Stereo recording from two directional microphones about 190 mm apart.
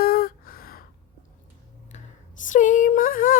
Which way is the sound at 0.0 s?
50° left (ahead or behind).